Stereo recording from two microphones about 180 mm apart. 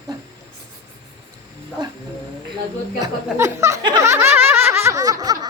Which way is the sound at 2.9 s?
20° right (ahead or behind).